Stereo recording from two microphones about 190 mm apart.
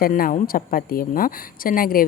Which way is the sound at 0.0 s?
50° left (ahead or behind).